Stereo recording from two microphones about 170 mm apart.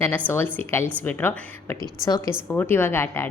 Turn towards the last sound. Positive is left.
turn(degrees=15)  # may be behind; listen again after turning